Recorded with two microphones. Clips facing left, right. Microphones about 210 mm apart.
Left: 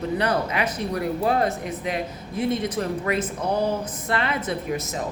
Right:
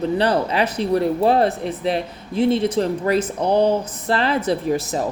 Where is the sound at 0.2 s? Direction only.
30° right (ahead or behind).